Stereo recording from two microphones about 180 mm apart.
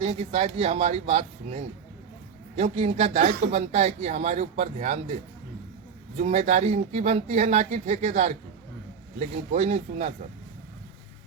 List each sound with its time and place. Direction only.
0.0 s speech: 35° right (ahead or behind)
6.1 s speech: 40° right (ahead or behind)